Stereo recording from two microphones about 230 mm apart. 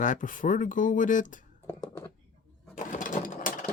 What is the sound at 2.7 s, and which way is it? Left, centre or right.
Sewing machine, left.